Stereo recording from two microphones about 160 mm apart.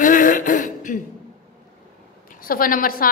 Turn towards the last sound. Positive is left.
turn(degrees=65)  # may be behind; listen again after turning